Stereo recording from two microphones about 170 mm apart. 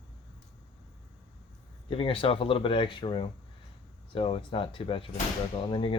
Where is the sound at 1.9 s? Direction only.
35° left (ahead or behind).